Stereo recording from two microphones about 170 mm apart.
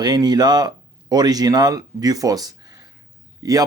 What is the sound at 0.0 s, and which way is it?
Speech, 25° right (ahead or behind).